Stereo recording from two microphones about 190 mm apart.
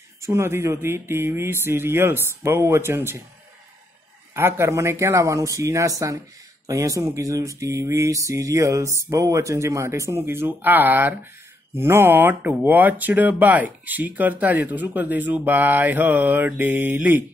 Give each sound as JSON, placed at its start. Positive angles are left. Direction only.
{"t": 0.2, "sound": "speech", "side_deg": -15}
{"t": 4.3, "sound": "speech", "side_deg": -10}